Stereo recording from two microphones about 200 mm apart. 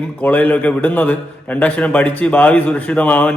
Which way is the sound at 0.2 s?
10° left (ahead or behind).